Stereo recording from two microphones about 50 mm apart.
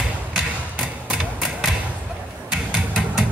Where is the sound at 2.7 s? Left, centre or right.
Centre.